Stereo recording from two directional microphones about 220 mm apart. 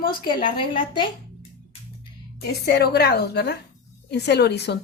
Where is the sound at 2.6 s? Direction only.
45° left (ahead or behind).